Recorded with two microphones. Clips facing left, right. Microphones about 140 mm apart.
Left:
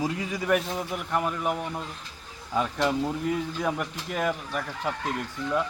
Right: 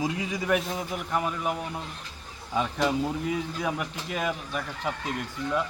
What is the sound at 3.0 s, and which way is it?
Speech, 5° right (ahead or behind).